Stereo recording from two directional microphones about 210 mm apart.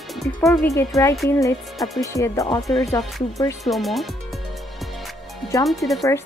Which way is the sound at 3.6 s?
Centre (ahead or behind).